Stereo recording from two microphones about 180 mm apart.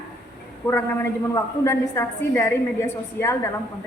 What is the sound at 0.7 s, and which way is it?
A woman's voice, 15° left (ahead or behind).